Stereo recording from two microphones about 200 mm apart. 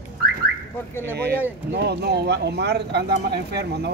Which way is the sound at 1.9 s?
55° right (ahead or behind).